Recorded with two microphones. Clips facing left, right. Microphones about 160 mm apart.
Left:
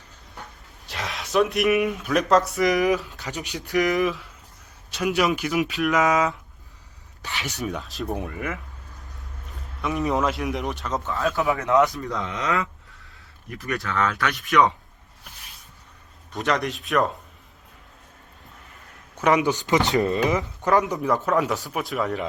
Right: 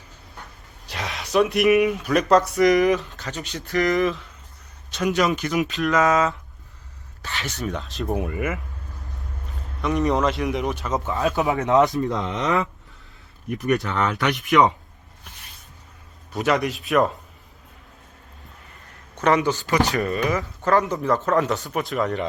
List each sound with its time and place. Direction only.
0.9 s speech: centre (ahead or behind)
3.2 s speech: 15° left (ahead or behind)
3.9 s speech: centre (ahead or behind)
5.9 s speech: 15° left (ahead or behind)
7.7 s speech: centre (ahead or behind)
9.8 s speech: centre (ahead or behind)
10.9 s speech: 20° right (ahead or behind)
16.3 s speech: 5° right (ahead or behind)
19.1 s speech: 10° left (ahead or behind)